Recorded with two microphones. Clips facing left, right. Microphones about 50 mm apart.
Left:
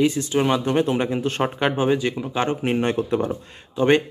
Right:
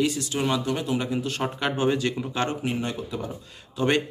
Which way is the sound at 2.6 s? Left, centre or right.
Left.